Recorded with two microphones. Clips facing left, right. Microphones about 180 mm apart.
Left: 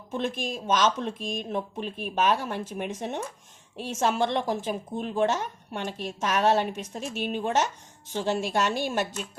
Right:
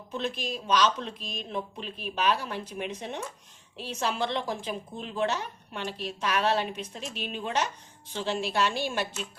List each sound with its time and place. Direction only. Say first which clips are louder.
0.1 s speech: left 3 dB; 50° left (ahead or behind)